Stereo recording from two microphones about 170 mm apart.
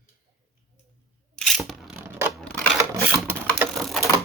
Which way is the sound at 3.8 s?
Centre (ahead or behind).